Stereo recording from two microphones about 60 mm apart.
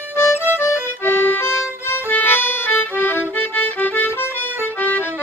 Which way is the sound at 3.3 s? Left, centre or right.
Left.